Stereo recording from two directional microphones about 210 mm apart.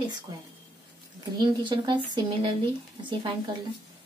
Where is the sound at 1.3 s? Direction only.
20° right (ahead or behind).